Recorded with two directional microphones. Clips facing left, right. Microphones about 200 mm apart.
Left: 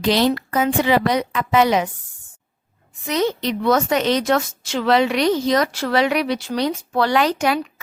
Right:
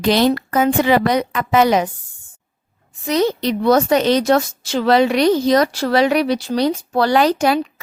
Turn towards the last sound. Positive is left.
turn(degrees=-35)  # may be behind; listen again after turning